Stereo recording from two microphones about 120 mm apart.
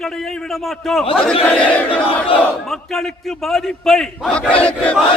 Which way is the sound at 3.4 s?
Centre (ahead or behind).